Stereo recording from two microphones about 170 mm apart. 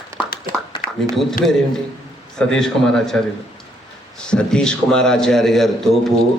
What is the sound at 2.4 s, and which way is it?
A man's voice, 5° left (ahead or behind).